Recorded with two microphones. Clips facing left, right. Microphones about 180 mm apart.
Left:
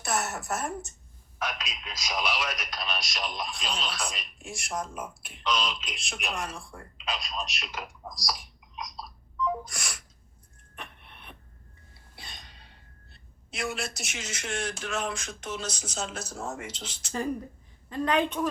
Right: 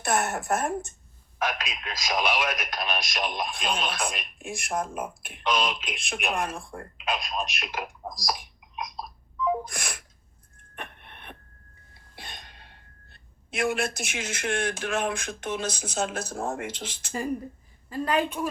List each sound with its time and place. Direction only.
0.0 s speech: 55° right (ahead or behind)
10.8 s a sound: 60° right (ahead or behind)
12.1 s speech: 55° right (ahead or behind)
17.8 s a woman's voice: 5° right (ahead or behind)